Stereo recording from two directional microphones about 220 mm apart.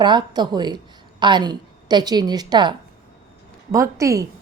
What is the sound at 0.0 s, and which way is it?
A woman's voice, 20° right (ahead or behind).